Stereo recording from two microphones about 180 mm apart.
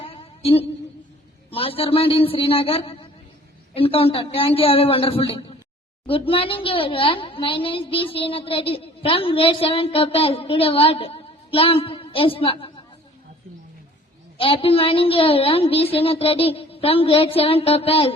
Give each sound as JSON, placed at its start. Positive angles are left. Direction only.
{"t": 0.0, "sound": "a sound", "side_deg": 30}
{"t": 1.5, "sound": "a woman's voice", "side_deg": 30}
{"t": 14.3, "sound": "a woman's voice", "side_deg": 30}